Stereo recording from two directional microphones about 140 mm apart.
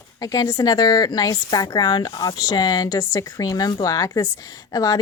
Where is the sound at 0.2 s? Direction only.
25° left (ahead or behind).